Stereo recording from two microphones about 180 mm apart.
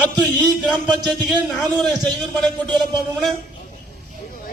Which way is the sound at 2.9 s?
Centre (ahead or behind).